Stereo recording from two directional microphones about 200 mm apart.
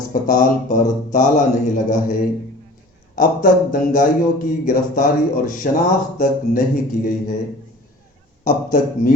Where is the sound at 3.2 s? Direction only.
45° left (ahead or behind).